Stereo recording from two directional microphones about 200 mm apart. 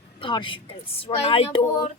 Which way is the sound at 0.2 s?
25° left (ahead or behind).